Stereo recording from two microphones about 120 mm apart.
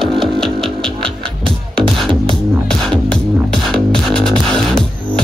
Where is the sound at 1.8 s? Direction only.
45° right (ahead or behind).